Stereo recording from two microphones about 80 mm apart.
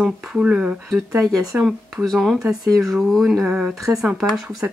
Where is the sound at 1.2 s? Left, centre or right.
Right.